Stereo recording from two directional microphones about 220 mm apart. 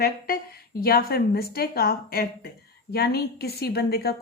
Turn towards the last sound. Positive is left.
turn(degrees=45)  # may be behind; listen again after turning